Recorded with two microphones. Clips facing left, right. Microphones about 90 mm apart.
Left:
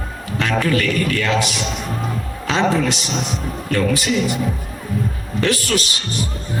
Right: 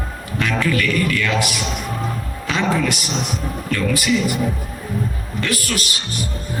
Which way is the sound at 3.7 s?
45° left (ahead or behind).